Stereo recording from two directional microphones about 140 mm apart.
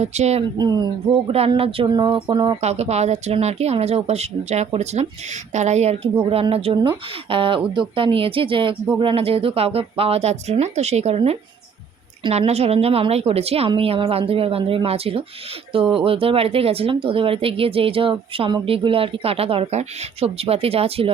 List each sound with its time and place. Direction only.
0.0 s speech: 50° right (ahead or behind)
0.5 s speech: 30° right (ahead or behind)
1.1 s speech: 45° right (ahead or behind)
2.6 s speech: 50° right (ahead or behind)
6.2 s speech: 40° right (ahead or behind)